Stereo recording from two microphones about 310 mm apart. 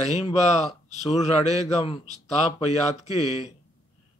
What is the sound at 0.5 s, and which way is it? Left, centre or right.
A man's voice, left.